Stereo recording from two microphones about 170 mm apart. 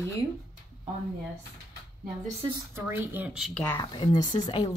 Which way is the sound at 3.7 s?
25° left (ahead or behind).